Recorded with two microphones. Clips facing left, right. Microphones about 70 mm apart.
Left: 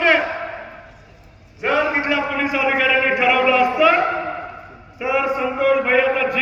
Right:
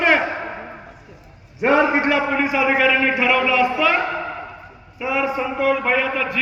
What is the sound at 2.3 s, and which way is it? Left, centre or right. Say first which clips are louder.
A man's voice: right 1 dB; centre.